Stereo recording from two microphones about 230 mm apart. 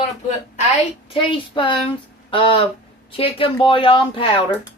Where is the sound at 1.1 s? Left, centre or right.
Left.